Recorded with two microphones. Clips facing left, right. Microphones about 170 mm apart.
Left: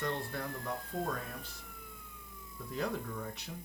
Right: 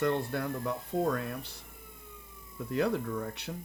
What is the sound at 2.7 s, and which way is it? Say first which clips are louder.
Speech: right 7 dB; 70° right (ahead or behind).